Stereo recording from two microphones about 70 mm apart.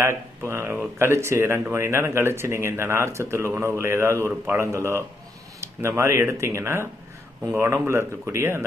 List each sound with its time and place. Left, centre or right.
0.0 s speech: right